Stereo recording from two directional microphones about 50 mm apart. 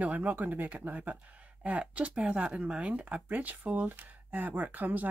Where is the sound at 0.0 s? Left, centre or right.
Right.